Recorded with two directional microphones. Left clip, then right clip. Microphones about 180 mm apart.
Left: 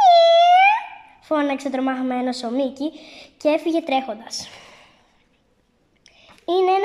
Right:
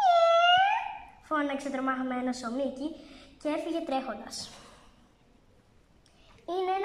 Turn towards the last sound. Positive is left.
turn(degrees=30)  # may be behind; listen again after turning